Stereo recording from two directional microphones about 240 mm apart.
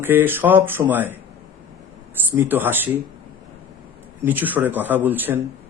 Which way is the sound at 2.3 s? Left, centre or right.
Centre.